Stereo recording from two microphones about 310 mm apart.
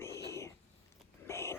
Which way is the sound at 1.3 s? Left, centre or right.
Centre.